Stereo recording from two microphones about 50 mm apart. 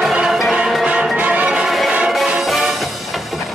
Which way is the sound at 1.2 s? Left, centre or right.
Right.